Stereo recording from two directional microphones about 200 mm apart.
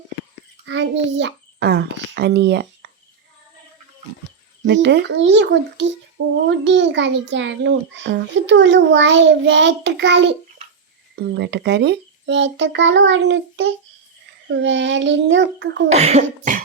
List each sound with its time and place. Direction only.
0.6 s a child's voice: 65° right (ahead or behind)
4.6 s a child's voice: 60° right (ahead or behind)
15.9 s cough: 35° right (ahead or behind)